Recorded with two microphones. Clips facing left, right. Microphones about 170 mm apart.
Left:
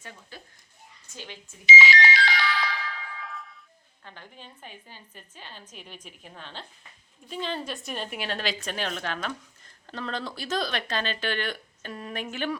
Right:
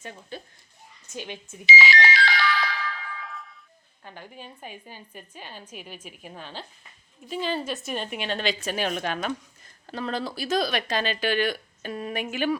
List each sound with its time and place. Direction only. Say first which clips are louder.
0.0 s speech: right 6 dB; 25° right (ahead or behind)
1.8 s speech: right 1 dB; 55° right (ahead or behind)
2.4 s ringtone: right 3 dB; 55° right (ahead or behind)
3.2 s a sound: even; centre (ahead or behind)
4.0 s a woman's voice: right 5 dB; 10° right (ahead or behind)
8.7 s speech: right 4 dB; 15° right (ahead or behind)